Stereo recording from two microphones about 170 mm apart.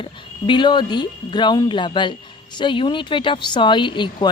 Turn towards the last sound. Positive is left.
turn(degrees=25)  # may be behind; listen again after turning